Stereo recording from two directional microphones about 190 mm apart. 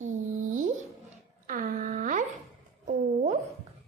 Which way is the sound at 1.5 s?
45° right (ahead or behind).